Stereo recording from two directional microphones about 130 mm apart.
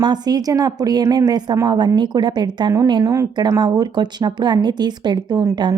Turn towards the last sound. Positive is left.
turn(degrees=-30)  # may be behind; listen again after turning